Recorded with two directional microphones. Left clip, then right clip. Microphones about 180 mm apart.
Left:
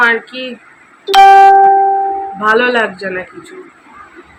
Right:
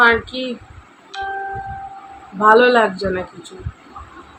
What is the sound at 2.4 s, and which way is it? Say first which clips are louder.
Speech: right 1 dB; 10° right (ahead or behind).